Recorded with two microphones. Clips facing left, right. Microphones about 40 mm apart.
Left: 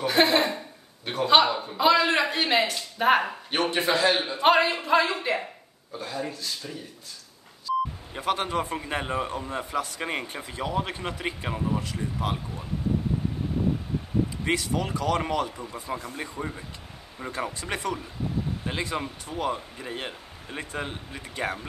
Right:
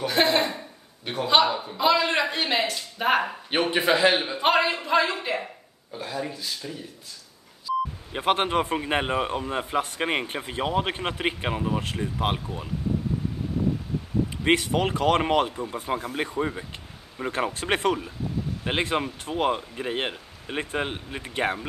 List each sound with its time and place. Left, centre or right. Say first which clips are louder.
0.0 s a sound: left 1 dB; centre
1.0 s a man's voice: left 1 dB; centre
3.5 s a man's voice: right 2 dB; centre
4.2 s a man's voice: even; centre
4.5 s a man's voice: left 2 dB; centre
5.9 s a man's voice: right 1 dB; right
8.1 s a man's voice: right 6 dB; right
14.4 s a man's voice: right 5 dB; right
15.5 s a man's voice: right 5 dB; right
17.3 s a man's voice: right 5 dB; right